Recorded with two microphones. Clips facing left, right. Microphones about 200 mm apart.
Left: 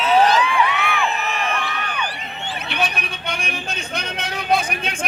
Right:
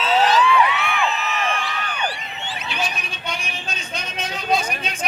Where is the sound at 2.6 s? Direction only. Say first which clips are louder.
Left 3 dB; 60° left (ahead or behind).